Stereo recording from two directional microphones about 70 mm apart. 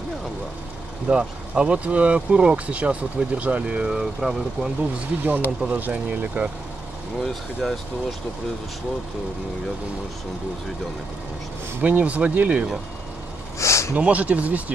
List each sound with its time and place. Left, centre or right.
1.1 s speech: centre
4.9 s speech: right
7.2 s speech: centre
11.8 s speech: right
13.6 s a sound: left
13.9 s speech: centre